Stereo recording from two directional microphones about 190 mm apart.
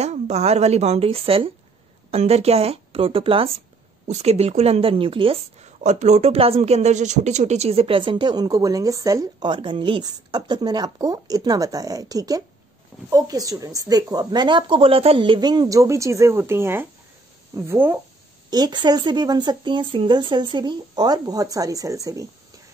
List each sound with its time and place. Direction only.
0.0 s a woman's voice: 35° right (ahead or behind); by 17.9 s 10° right (ahead or behind)
18.5 s a woman's voice: 25° right (ahead or behind)